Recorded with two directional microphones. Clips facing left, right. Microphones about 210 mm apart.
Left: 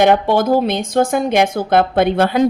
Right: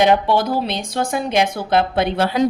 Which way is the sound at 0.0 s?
50° left (ahead or behind).